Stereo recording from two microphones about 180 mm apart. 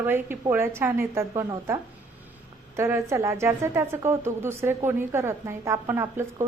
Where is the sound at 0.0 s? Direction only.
10° right (ahead or behind).